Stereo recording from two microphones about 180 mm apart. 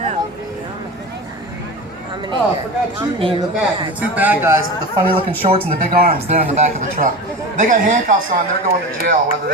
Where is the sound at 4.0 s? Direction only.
10° right (ahead or behind).